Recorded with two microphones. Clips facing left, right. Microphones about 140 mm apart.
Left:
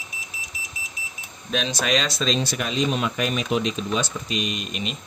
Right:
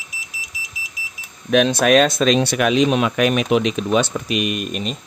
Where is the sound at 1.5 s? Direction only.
60° right (ahead or behind).